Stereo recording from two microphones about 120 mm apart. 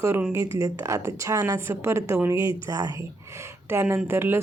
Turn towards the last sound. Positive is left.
turn(degrees=-20)  # may be behind; listen again after turning